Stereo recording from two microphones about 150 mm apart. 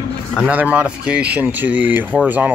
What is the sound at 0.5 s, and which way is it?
Speech, 10° right (ahead or behind).